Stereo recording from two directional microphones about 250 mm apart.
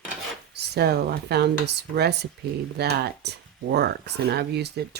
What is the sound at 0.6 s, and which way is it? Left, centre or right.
Speech, right.